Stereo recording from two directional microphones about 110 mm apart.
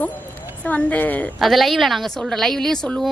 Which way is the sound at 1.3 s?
Centre (ahead or behind).